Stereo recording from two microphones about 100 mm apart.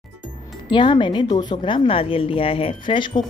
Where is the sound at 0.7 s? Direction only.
55° left (ahead or behind).